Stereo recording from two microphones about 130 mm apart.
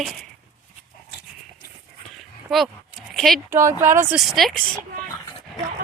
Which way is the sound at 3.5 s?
20° right (ahead or behind).